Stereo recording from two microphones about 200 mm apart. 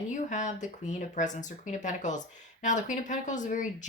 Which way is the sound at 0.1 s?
40° left (ahead or behind).